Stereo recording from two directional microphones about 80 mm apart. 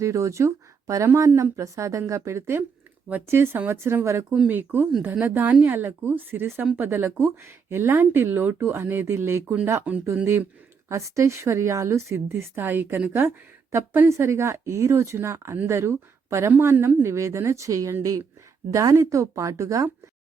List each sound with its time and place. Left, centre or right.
0.0 s speech: right
4.4 s speech: right
10.8 s speech: right